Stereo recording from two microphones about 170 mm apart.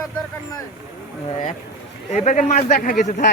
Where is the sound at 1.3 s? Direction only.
35° left (ahead or behind).